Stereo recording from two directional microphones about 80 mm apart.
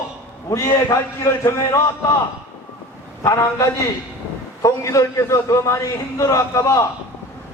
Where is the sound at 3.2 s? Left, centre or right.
Left.